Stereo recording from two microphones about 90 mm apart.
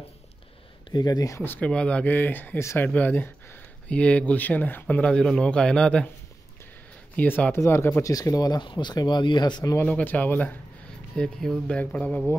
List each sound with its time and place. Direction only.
0.9 s speech: 50° left (ahead or behind)
1.4 s speech: 20° left (ahead or behind)
1.7 s speech: 10° left (ahead or behind)
7.2 s speech: 20° left (ahead or behind)
8.1 s speech: 45° left (ahead or behind)
9.9 s speech: 20° left (ahead or behind)
11.1 s speech: 5° left (ahead or behind)